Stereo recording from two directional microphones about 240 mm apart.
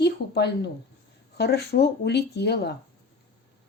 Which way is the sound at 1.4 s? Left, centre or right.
Left.